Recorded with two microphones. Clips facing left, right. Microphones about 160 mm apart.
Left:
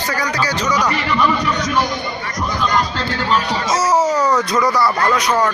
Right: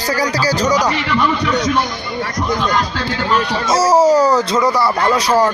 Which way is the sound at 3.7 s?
35° right (ahead or behind).